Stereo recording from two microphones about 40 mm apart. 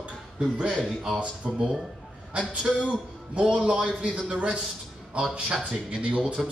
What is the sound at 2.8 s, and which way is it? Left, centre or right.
A man's voice, right.